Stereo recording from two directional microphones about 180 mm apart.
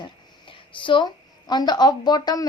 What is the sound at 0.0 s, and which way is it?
A woman's voice, 30° left (ahead or behind).